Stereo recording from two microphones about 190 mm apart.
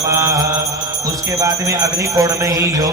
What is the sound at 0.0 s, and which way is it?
Mantra, 15° right (ahead or behind).